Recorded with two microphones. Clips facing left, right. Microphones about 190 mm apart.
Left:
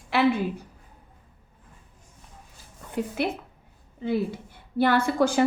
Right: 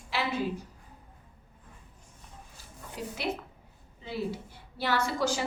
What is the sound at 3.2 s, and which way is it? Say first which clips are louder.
A woman's voice: left 6 dB; 55° left (ahead or behind).